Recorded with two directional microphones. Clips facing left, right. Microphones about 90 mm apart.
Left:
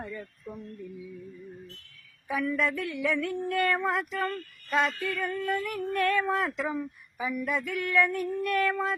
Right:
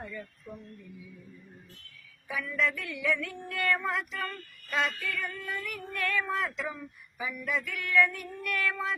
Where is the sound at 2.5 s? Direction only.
40° left (ahead or behind).